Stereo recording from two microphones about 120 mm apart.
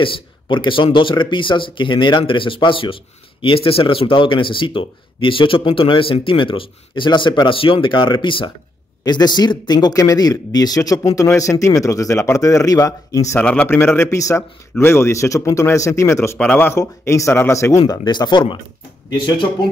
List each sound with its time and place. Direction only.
0.0 s speech: 45° left (ahead or behind); by 13.4 s 25° left (ahead or behind)
13.4 s a man's voice: 10° left (ahead or behind)
13.7 s speech: 20° left (ahead or behind)
17.8 s speech: 35° left (ahead or behind)